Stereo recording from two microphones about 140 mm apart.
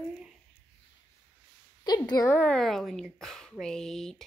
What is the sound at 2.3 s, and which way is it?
A woman's voice, 10° left (ahead or behind).